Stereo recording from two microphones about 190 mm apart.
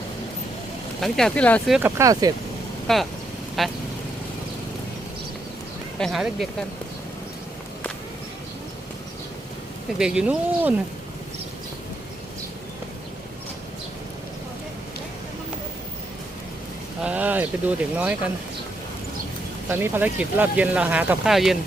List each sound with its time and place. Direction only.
1.0 s speech: 5° left (ahead or behind)
2.0 s speech: 20° right (ahead or behind)
2.8 s speech: centre (ahead or behind)
6.0 s speech: centre (ahead or behind)
10.0 s speech: 5° right (ahead or behind)
17.0 s speech: 5° right (ahead or behind)
19.6 s speech: 10° right (ahead or behind)